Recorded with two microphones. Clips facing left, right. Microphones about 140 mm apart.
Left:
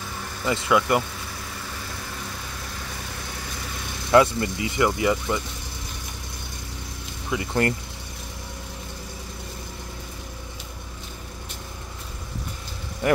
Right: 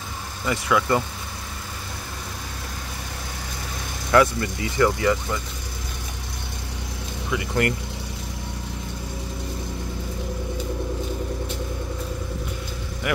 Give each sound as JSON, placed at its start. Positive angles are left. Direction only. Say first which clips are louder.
{"t": 0.5, "sound": "speech", "louder": "left 1 dB", "side_deg": 20}
{"t": 4.1, "sound": "speech", "louder": "left 1 dB", "side_deg": 25}
{"t": 7.2, "sound": "speech", "louder": "even", "side_deg": 30}
{"t": 13.0, "sound": "vehicle", "louder": "left 4 dB", "side_deg": 35}